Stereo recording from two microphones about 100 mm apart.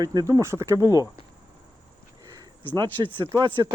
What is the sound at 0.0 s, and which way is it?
Speech, 45° right (ahead or behind).